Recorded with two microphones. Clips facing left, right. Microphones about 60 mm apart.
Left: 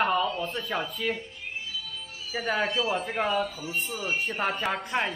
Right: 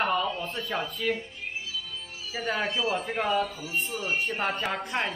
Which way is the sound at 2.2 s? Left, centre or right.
Centre.